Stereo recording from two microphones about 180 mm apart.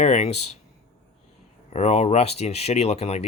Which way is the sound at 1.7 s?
40° left (ahead or behind).